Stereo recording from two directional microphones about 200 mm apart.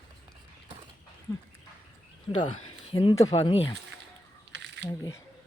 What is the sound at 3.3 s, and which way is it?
Speech, 30° left (ahead or behind).